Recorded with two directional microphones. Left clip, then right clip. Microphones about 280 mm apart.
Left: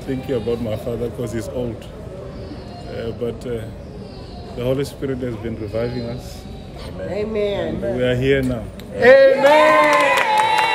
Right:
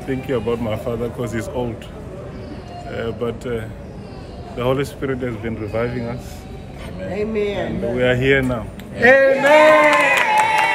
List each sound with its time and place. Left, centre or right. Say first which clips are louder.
0.0 s a man's voice: right 1 dB; centre
2.9 s a man's voice: right 1 dB; centre
7.1 s speech: even; left
7.9 s a man's voice: right 2 dB; centre
9.0 s speech: left 2 dB; left